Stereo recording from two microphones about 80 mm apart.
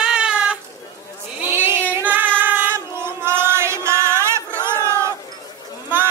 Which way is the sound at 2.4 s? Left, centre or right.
Right.